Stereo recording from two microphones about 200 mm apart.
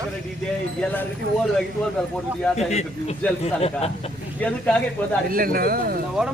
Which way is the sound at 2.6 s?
35° left (ahead or behind).